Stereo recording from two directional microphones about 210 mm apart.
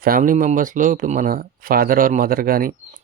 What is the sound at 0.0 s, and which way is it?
Speech, 40° right (ahead or behind).